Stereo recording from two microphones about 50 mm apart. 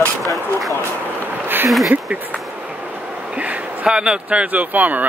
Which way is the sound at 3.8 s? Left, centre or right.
Centre.